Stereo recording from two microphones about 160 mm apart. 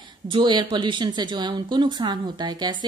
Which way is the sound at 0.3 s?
30° right (ahead or behind).